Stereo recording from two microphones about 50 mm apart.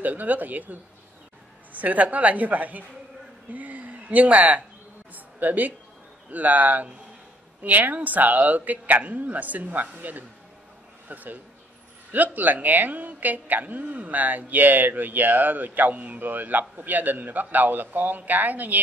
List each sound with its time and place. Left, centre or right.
0.0 s speech: right